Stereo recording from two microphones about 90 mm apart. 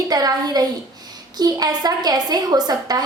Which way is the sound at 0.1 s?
45° right (ahead or behind).